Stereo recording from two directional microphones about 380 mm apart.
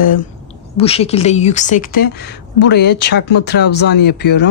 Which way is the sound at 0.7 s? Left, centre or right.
Centre.